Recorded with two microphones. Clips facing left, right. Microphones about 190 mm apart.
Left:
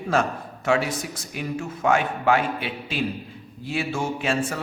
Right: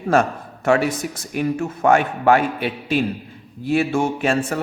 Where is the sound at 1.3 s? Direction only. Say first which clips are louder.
Right 8 dB; 50° right (ahead or behind).